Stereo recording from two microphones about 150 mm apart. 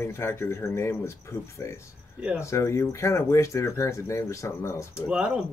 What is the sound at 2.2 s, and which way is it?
Speech, 10° right (ahead or behind).